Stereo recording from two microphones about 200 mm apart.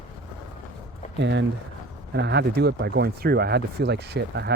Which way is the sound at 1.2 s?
60° right (ahead or behind).